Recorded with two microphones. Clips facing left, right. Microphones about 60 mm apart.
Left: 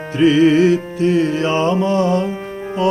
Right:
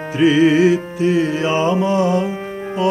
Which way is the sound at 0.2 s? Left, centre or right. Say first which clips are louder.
Left 1 dB; centre.